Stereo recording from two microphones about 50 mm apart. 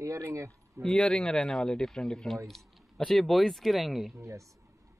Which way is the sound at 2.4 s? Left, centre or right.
Centre.